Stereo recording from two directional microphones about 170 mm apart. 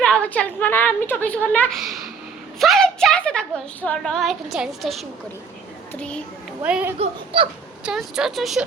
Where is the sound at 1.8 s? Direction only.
Centre (ahead or behind).